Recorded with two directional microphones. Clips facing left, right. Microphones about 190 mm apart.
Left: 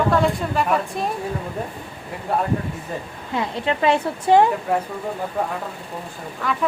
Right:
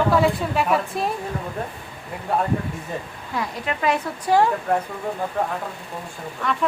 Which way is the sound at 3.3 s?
25° left (ahead or behind).